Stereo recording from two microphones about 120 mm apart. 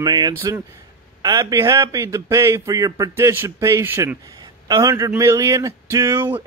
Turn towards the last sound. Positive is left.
turn(degrees=-20)  # may be behind; listen again after turning